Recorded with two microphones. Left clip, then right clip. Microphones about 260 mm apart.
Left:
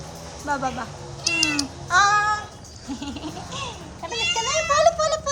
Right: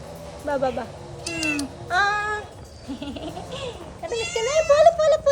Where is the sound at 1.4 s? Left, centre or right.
Centre.